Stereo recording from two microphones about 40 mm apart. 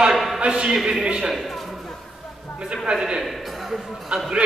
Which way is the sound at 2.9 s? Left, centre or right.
Centre.